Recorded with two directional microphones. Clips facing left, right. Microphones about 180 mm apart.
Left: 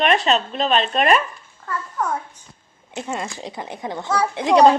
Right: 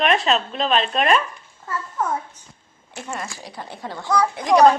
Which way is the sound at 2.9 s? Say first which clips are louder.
Left 4 dB; 20° left (ahead or behind).